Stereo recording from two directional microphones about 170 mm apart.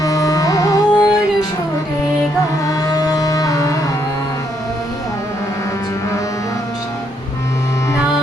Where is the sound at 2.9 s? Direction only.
20° left (ahead or behind).